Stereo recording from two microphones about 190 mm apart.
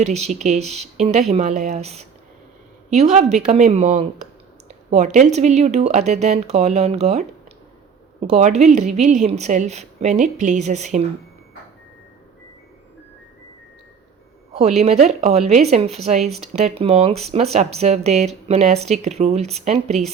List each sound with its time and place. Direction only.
0.0 s speech: 35° right (ahead or behind)
14.8 s speech: 35° right (ahead or behind)